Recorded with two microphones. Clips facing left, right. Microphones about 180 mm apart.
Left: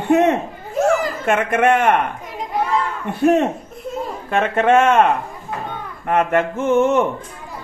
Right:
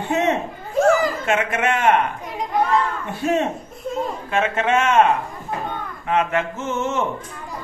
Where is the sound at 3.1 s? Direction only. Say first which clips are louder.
Left 6 dB; 55° left (ahead or behind).